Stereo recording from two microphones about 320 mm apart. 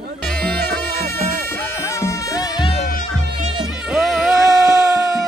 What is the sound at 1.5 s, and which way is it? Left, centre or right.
Music, centre.